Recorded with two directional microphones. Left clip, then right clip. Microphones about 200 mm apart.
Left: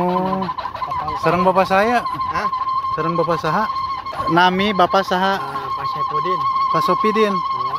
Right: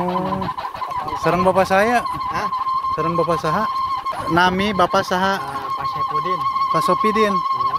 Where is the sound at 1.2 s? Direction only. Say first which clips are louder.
Left 1 dB; 5° right (ahead or behind).